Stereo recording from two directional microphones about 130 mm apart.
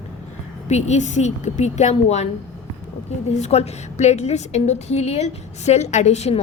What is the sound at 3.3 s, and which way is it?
A woman's voice, 55° left (ahead or behind).